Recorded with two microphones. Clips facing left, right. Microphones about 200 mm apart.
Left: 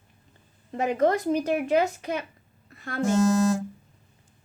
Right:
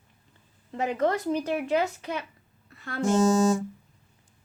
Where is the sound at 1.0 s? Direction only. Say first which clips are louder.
Left 3 dB; 45° left (ahead or behind).